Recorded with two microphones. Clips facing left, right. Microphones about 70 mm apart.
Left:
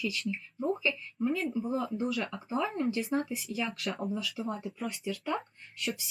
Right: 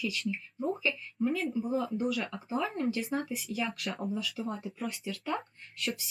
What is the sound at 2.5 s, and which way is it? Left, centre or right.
Speech, centre.